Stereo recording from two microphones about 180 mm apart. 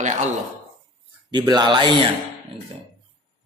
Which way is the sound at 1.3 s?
25° right (ahead or behind).